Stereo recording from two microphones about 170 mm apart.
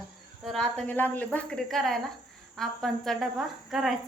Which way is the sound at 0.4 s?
5° left (ahead or behind).